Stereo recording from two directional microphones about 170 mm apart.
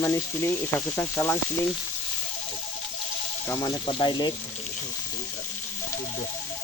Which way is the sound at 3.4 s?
15° left (ahead or behind).